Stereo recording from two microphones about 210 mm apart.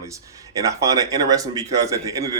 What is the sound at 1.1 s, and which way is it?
A man's voice, 15° right (ahead or behind).